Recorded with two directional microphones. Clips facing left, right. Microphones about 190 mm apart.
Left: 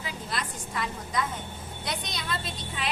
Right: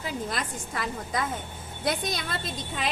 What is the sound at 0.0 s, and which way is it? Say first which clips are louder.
A woman's voice: right 3 dB; 50° right (ahead or behind).